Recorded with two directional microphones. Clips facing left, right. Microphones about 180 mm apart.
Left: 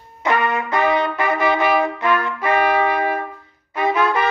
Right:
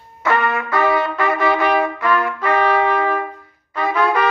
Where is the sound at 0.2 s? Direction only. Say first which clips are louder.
Right 1 dB; 20° left (ahead or behind).